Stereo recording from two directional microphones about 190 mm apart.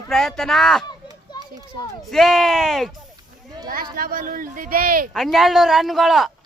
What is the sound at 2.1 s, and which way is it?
Speech, centre (ahead or behind).